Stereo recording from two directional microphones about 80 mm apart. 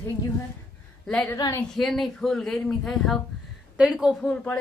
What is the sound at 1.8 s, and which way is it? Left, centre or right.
A woman's voice, centre.